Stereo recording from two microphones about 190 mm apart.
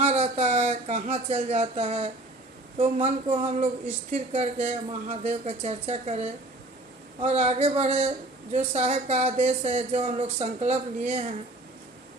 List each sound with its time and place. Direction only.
0.0 s speech: 30° right (ahead or behind)